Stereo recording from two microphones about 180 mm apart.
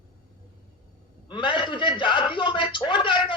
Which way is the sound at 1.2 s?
25° left (ahead or behind).